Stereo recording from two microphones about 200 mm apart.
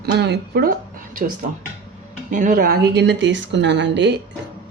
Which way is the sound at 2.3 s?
40° right (ahead or behind).